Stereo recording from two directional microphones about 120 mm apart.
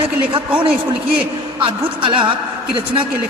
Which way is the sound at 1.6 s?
45° right (ahead or behind).